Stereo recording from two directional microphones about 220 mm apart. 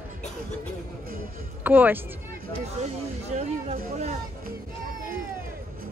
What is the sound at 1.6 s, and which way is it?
Speech, 5° right (ahead or behind).